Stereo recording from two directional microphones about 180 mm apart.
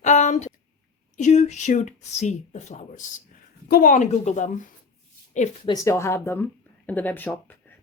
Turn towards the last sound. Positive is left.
turn(degrees=10)  # may be behind; listen again after turning